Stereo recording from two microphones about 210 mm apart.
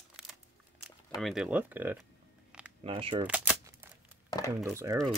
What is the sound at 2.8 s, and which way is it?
Speech, 25° right (ahead or behind).